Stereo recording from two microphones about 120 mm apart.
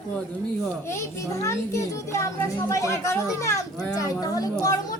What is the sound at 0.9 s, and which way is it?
A child's voice, 25° left (ahead or behind).